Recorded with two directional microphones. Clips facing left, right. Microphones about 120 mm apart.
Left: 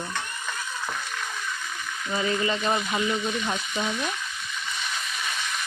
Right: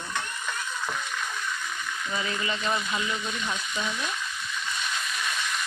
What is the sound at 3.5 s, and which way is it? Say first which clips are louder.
Speech: left 3 dB; 45° left (ahead or behind).